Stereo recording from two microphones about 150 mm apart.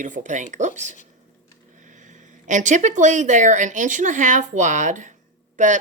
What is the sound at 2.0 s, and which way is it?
Speech, 55° right (ahead or behind).